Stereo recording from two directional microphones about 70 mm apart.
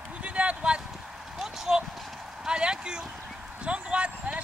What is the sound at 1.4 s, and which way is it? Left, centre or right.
Speech, centre.